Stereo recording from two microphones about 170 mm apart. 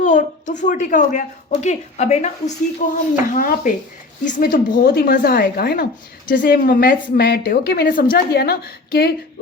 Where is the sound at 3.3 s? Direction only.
55° left (ahead or behind).